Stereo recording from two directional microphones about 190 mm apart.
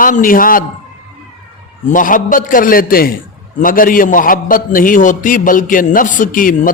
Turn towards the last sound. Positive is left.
turn(degrees=45)  # may be behind; listen again after turning